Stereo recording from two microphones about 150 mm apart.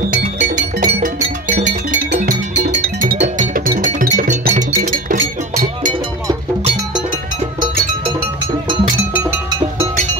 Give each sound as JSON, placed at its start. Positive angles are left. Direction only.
{"t": 0.1, "sound": "music", "side_deg": -60}